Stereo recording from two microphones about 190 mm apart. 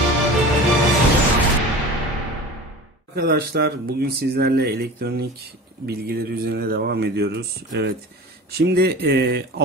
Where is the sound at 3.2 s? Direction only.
55° right (ahead or behind).